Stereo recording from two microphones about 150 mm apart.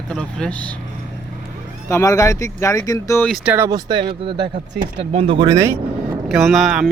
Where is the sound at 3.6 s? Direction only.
25° right (ahead or behind).